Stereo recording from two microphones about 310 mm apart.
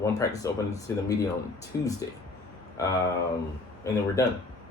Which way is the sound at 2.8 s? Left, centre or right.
Centre.